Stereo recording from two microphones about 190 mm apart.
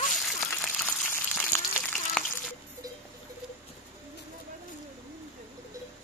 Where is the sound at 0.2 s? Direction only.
Centre (ahead or behind).